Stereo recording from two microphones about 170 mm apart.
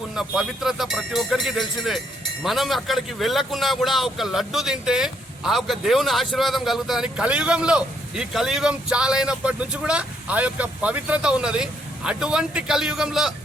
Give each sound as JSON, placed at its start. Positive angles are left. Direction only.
{"t": 0.1, "sound": "a man's voice", "side_deg": -5}